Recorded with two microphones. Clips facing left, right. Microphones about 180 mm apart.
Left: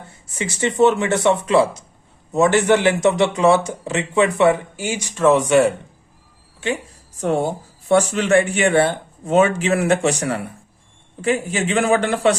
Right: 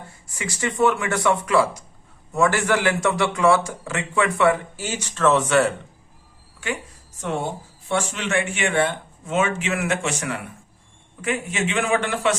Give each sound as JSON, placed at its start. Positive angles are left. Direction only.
{"t": 0.3, "sound": "a man's voice", "side_deg": 25}
{"t": 7.2, "sound": "speech", "side_deg": 40}